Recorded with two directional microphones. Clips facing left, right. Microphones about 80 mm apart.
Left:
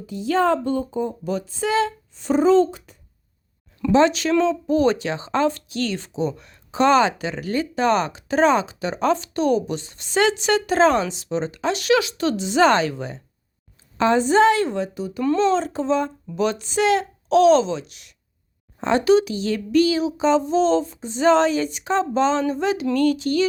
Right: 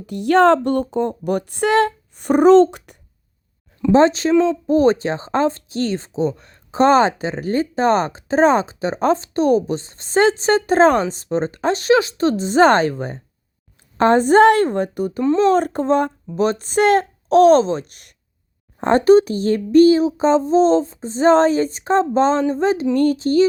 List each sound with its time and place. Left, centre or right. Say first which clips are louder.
0.0 s speech: right 7 dB; right
3.9 s speech: right 3 dB; right
16.4 s speech: right 4 dB; right